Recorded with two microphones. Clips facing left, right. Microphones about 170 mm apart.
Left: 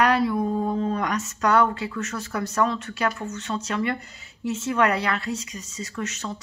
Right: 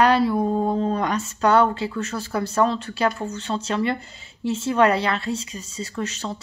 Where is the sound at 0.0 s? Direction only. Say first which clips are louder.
Right 3 dB; 30° right (ahead or behind).